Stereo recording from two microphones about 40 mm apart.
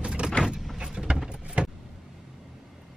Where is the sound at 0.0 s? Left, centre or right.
Right.